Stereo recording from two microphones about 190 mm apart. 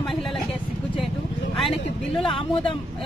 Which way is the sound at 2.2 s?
25° left (ahead or behind).